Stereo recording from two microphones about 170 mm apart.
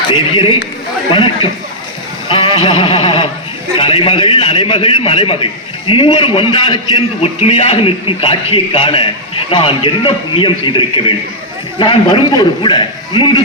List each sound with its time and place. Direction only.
0.1 s a man's voice: 30° left (ahead or behind)
2.3 s a sound: 25° left (ahead or behind)
3.8 s a man's voice: 30° left (ahead or behind)